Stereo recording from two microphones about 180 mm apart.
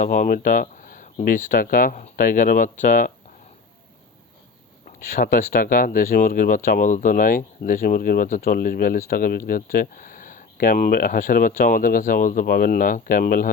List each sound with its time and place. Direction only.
0.0 s speech: 45° left (ahead or behind)
4.9 s speech: 50° left (ahead or behind)